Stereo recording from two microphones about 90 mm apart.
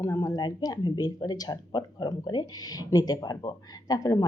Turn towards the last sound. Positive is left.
turn(degrees=40)  # may be behind; listen again after turning